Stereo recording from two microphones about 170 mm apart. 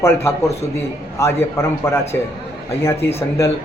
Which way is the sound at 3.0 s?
15° left (ahead or behind).